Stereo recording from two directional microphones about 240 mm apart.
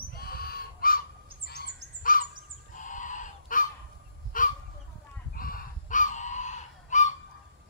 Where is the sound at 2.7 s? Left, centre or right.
Left.